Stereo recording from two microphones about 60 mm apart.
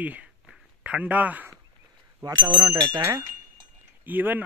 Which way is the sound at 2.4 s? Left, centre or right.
Right.